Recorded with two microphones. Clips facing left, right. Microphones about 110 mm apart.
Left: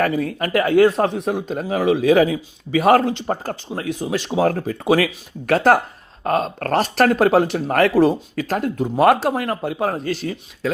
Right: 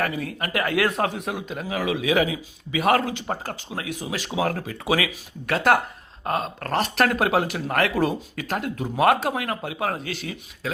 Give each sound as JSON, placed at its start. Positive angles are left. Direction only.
{"t": 0.0, "sound": "speech", "side_deg": 45}
{"t": 0.9, "sound": "speech", "side_deg": 25}